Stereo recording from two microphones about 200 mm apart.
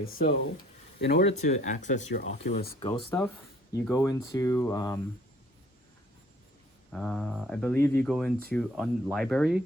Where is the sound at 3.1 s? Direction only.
10° left (ahead or behind).